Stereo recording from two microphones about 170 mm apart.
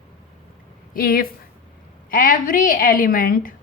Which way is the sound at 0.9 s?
60° left (ahead or behind).